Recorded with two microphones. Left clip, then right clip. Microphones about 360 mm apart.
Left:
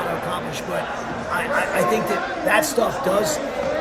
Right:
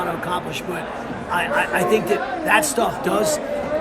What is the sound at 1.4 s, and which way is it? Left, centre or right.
A man's voice, centre.